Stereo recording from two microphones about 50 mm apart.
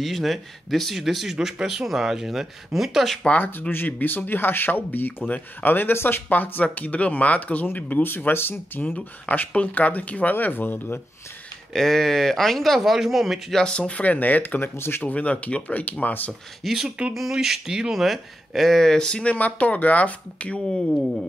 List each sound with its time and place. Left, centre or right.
0.0 s speech: centre
3.3 s speech: left
6.2 s speech: left
7.6 s speech: left
10.3 s speech: left
11.7 s speech: centre
13.7 s speech: left
14.8 s speech: left
15.0 s speech: left
16.6 s speech: centre
19.3 s speech: left
20.7 s speech: centre